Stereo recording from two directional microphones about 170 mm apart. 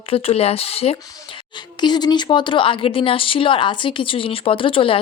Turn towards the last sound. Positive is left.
turn(degrees=30)  # may be behind; listen again after turning